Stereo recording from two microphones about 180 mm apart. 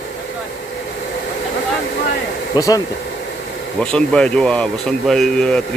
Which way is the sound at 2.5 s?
20° left (ahead or behind).